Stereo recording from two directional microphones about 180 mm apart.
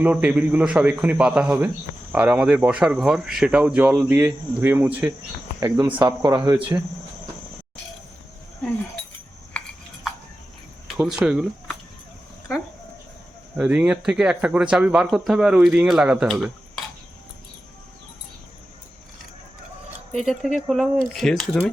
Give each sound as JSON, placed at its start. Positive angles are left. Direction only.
{"t": 0.0, "sound": "speech", "side_deg": -10}
{"t": 9.5, "sound": "a sound", "side_deg": 5}
{"t": 10.8, "sound": "speech", "side_deg": -5}
{"t": 13.6, "sound": "speech", "side_deg": -5}
{"t": 20.1, "sound": "speech", "side_deg": 0}